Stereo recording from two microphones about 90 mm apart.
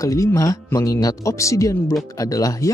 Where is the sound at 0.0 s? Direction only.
35° left (ahead or behind).